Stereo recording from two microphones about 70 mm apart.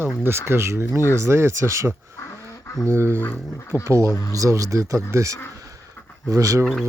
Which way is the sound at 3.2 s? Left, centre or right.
Left.